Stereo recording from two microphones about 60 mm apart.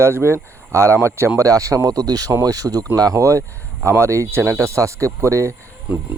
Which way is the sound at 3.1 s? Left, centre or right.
Right.